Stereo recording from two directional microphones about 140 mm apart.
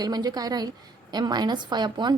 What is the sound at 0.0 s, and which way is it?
A woman's voice, 30° right (ahead or behind).